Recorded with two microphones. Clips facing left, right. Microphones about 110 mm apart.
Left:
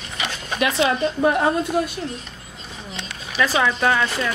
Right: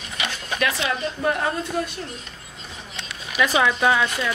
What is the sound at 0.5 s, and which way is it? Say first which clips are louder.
Speech: left 5 dB; 25° left (ahead or behind).